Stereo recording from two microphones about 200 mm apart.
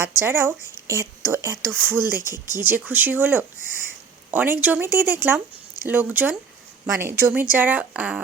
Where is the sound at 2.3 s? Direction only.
20° left (ahead or behind).